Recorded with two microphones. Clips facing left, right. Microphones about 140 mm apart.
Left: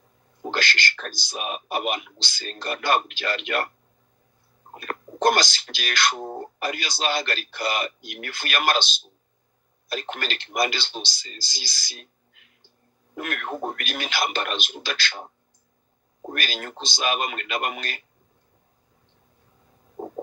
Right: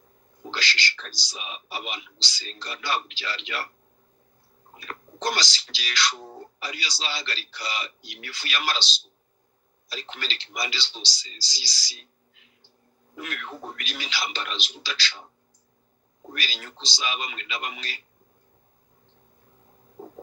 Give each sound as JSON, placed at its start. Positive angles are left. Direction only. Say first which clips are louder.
{"t": 0.4, "sound": "speech", "louder": "left 5 dB", "side_deg": 50}
{"t": 4.7, "sound": "speech", "louder": "left 8 dB", "side_deg": 55}